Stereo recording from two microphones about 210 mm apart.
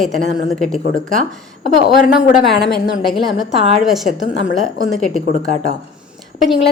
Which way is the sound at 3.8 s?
Centre (ahead or behind).